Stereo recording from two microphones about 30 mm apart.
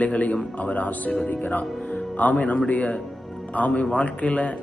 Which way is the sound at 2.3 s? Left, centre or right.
Left.